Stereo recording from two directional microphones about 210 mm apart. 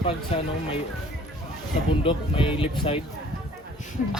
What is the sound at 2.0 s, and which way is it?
Speech, 25° left (ahead or behind).